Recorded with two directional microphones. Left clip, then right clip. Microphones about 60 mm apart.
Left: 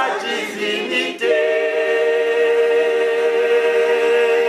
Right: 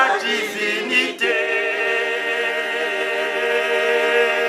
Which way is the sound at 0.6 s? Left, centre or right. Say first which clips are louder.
Right 1 dB; right.